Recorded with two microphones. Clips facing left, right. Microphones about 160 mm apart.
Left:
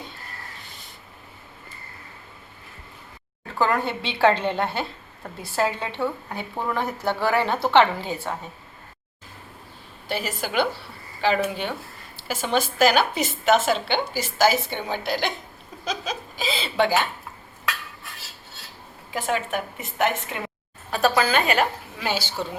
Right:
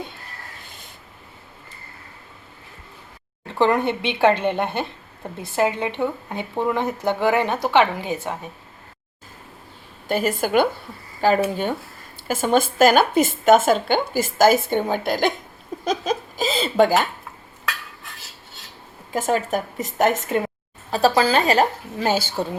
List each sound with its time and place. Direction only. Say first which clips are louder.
3.4 s speech: right 4 dB; 20° right (ahead or behind)
10.1 s speech: right 8 dB; 50° right (ahead or behind)
19.1 s a woman's voice: right 4 dB; 40° right (ahead or behind)
20.9 s a woman's voice: right 3 dB; 30° right (ahead or behind); by 22.4 s 50° right (ahead or behind)